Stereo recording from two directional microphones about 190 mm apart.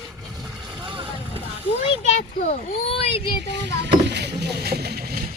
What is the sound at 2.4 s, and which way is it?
Speech, 30° left (ahead or behind).